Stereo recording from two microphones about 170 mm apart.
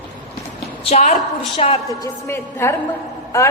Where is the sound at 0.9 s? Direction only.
45° left (ahead or behind).